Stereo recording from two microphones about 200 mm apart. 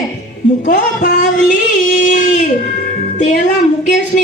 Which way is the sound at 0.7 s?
40° left (ahead or behind).